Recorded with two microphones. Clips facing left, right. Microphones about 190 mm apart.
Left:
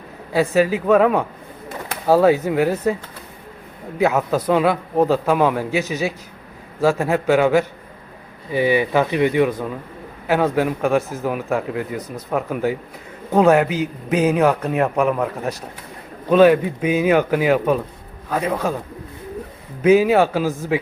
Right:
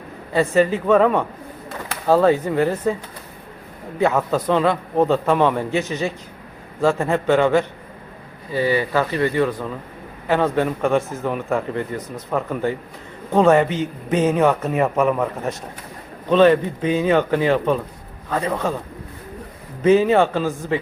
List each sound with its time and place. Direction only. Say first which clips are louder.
0.3 s a man's voice: even; 5° left (ahead or behind)
19.8 s speech: left 1 dB; 5° left (ahead or behind)